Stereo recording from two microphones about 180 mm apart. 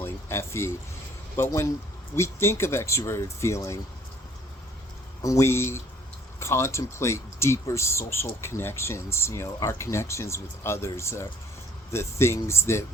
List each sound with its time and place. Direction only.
0.0 s a sound: 15° left (ahead or behind)
1.4 s speech: 15° left (ahead or behind)
5.2 s speech: 15° left (ahead or behind)